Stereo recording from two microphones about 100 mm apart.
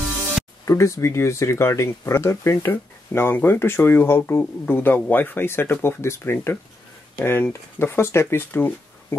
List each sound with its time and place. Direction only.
0.7 s speech: 30° left (ahead or behind)